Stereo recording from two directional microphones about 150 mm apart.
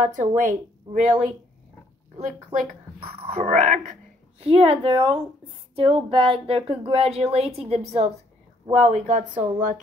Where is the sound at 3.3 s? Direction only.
55° right (ahead or behind).